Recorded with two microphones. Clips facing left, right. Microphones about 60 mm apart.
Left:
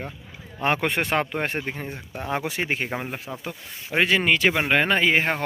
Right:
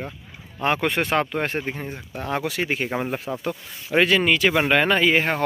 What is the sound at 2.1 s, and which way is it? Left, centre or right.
Speech, centre.